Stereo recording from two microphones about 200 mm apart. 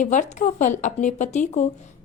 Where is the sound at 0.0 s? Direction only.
40° left (ahead or behind).